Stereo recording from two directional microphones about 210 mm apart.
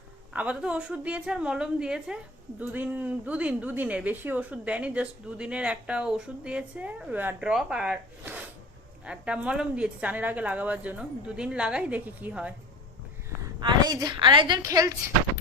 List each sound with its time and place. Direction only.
0.3 s a woman's voice: 5° right (ahead or behind)
13.6 s a woman's voice: 20° right (ahead or behind)